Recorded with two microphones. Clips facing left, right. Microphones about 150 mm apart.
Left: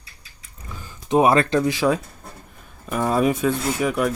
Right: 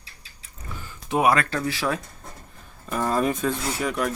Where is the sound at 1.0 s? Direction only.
25° left (ahead or behind).